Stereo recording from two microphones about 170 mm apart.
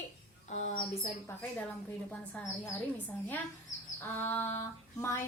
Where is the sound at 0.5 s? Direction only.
45° left (ahead or behind).